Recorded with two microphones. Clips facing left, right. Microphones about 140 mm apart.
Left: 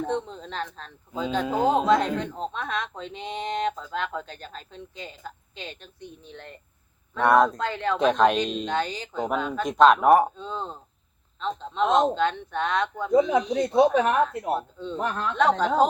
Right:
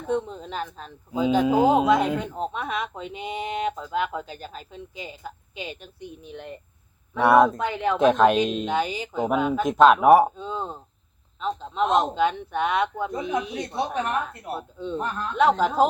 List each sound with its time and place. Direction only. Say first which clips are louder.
0.1 s speech: right 3 dB; 5° right (ahead or behind)
7.9 s speech: right 2 dB; centre (ahead or behind)
14.0 s speech: left 5 dB; 90° left
15.4 s speech: right 2 dB; 5° right (ahead or behind)